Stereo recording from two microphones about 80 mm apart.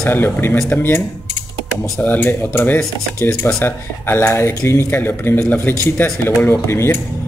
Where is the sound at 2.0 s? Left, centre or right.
Left.